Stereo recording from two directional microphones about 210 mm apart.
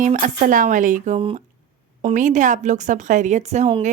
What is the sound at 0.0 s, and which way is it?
A woman's voice, 40° right (ahead or behind).